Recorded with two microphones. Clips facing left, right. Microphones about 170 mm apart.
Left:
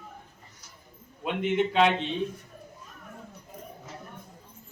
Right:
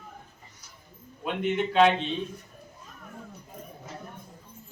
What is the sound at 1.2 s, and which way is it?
Speech, 20° left (ahead or behind).